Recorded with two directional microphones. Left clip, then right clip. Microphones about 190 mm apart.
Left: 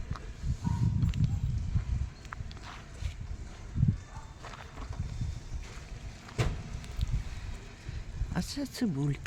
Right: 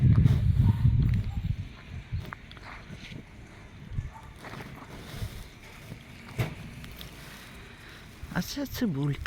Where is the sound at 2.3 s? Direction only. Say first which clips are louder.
Right 1 dB; 35° right (ahead or behind).